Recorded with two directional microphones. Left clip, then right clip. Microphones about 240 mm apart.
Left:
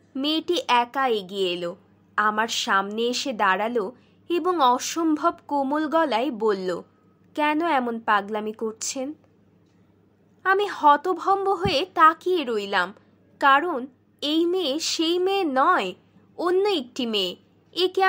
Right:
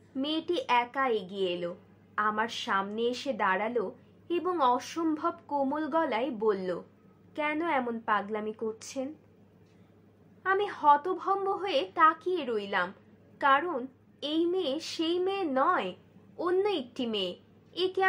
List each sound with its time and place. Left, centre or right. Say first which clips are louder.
0.1 s a woman's voice: left 7 dB; left
10.4 s a woman's voice: left 7 dB; left